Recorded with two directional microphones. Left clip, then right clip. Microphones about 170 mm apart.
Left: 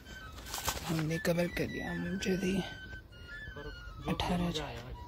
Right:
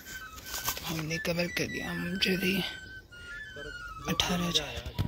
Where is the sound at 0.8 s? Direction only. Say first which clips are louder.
Left 1 dB; 30° left (ahead or behind).